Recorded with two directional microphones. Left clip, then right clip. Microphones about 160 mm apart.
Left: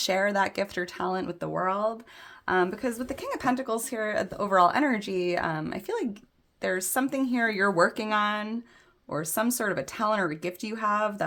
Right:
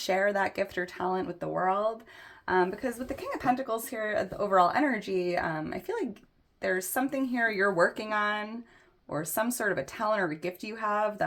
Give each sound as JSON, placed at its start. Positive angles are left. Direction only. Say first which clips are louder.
{"t": 0.0, "sound": "speech", "louder": "left 2 dB", "side_deg": 35}